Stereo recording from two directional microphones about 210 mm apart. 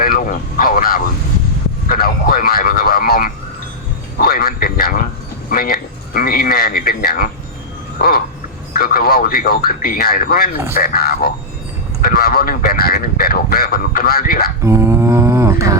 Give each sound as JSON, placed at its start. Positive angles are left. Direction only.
{"t": 0.0, "sound": "speech", "side_deg": 45}
{"t": 8.7, "sound": "speech", "side_deg": 45}
{"t": 14.6, "sound": "mantra", "side_deg": -10}